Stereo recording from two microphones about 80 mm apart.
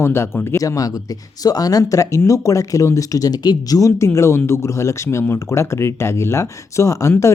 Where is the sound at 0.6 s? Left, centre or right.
Left.